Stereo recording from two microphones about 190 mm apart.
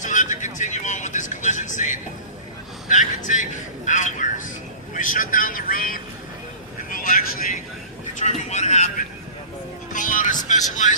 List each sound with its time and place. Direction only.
0.0 s vehicle: 40° left (ahead or behind)
2.9 s a man's voice: 40° left (ahead or behind)
8.2 s a man's voice: 35° left (ahead or behind)